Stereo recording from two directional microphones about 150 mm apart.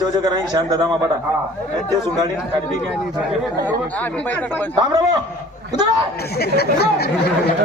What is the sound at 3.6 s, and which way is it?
Speech, 10° left (ahead or behind).